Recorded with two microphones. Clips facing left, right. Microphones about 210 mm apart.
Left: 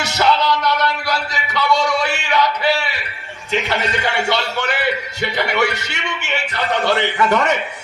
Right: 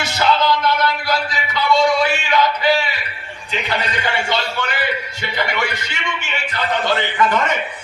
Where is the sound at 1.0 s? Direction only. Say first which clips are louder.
Right 1 dB; 70° left (ahead or behind).